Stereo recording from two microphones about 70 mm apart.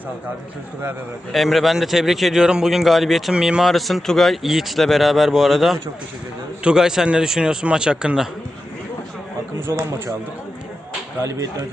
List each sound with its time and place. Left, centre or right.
1.3 s a man's voice: centre
9.6 s speech: right
11.2 s speech: right